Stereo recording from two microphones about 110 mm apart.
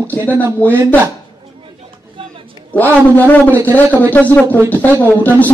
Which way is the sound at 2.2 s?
50° right (ahead or behind).